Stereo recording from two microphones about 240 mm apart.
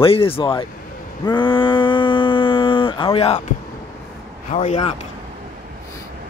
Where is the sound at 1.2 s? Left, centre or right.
Centre.